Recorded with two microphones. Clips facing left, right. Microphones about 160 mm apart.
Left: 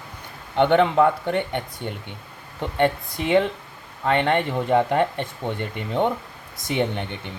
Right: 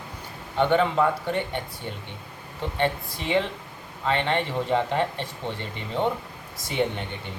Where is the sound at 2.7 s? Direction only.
55° left (ahead or behind).